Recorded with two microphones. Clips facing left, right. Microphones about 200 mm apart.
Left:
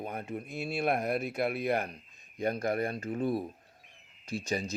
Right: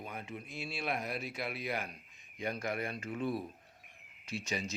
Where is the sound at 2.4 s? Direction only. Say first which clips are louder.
Left 7 dB; 40° left (ahead or behind).